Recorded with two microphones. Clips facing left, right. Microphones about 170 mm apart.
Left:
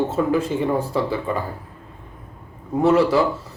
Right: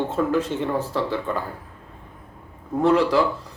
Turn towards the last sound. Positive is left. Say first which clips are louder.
# left 2 dB
turn(degrees=5)  # may be behind; listen again after turning